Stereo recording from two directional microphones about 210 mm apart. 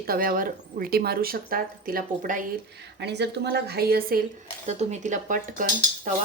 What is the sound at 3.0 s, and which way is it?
Speech, 55° right (ahead or behind).